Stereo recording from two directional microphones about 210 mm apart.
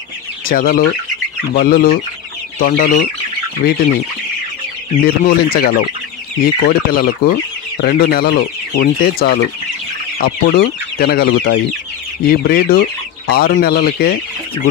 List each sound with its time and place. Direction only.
0.5 s chicken: 40° left (ahead or behind)
1.6 s speech: 45° left (ahead or behind)
2.6 s chicken: 40° left (ahead or behind)
4.9 s speech: 45° left (ahead or behind)
10.5 s speech: 40° left (ahead or behind)